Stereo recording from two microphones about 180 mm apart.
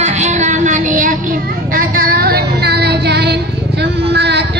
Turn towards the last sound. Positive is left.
turn(degrees=-70)  # may be behind; listen again after turning